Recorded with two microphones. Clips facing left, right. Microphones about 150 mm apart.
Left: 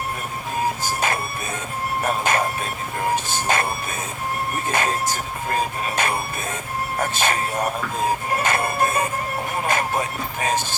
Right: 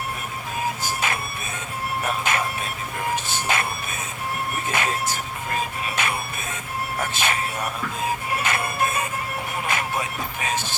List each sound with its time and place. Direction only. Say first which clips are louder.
2.0 s music: left 4 dB; 45° left (ahead or behind)
4.7 s music: left 3 dB; 40° left (ahead or behind)
8.6 s music: left 4 dB; 35° left (ahead or behind)